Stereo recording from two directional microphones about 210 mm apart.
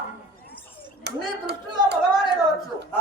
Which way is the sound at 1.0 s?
50° right (ahead or behind).